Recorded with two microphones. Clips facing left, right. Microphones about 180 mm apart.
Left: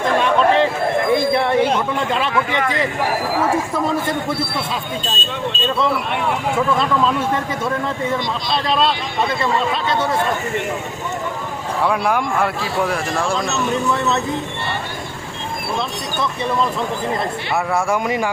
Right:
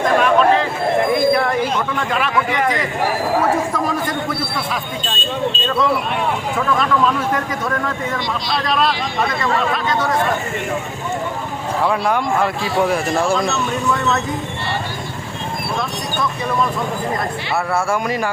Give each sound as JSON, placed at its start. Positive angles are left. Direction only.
{"t": 0.2, "sound": "a sound", "side_deg": 30}
{"t": 6.7, "sound": "speech", "side_deg": 25}
{"t": 8.4, "sound": "speech", "side_deg": 25}
{"t": 11.9, "sound": "speech", "side_deg": 5}
{"t": 17.7, "sound": "speech", "side_deg": 15}